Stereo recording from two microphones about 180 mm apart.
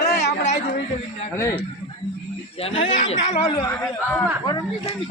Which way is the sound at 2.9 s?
40° left (ahead or behind).